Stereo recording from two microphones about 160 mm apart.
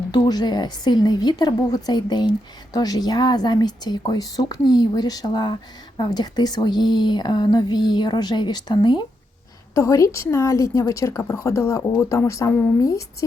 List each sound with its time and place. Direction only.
0.1 s a woman's voice: 25° left (ahead or behind)
9.7 s a woman's voice: 20° left (ahead or behind)